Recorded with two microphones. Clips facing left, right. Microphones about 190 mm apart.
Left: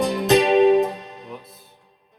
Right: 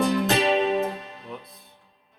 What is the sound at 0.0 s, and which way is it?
Music, 15° left (ahead or behind).